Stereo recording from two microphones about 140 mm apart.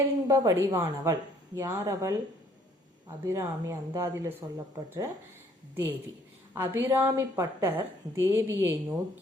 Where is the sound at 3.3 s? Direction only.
20° right (ahead or behind).